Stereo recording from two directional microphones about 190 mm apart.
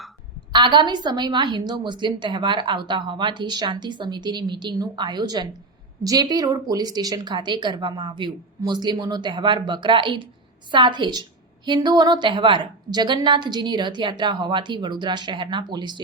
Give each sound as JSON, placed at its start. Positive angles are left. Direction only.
{"t": 0.5, "sound": "a woman's voice", "side_deg": -25}